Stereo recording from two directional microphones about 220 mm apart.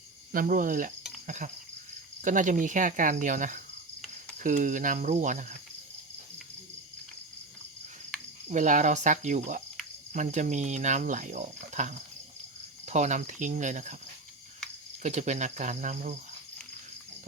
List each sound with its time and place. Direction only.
0.3 s speech: 40° right (ahead or behind)
2.2 s speech: 35° right (ahead or behind)
8.4 s speech: 35° right (ahead or behind)
15.0 s speech: 35° right (ahead or behind)